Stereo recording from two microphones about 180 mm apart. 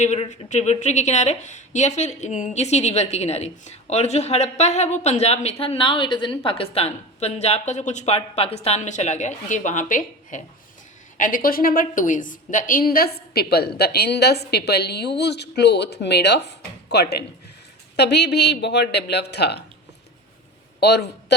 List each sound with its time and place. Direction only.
0.0 s a woman's voice: 40° left (ahead or behind); by 19.6 s 65° left (ahead or behind)
20.8 s a man's voice: 70° left (ahead or behind)